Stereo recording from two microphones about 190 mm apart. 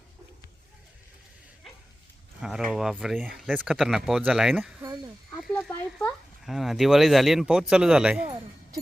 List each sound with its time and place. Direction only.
2.4 s speech: 5° right (ahead or behind)
5.3 s a sound: 5° left (ahead or behind)
7.7 s speech: 5° right (ahead or behind)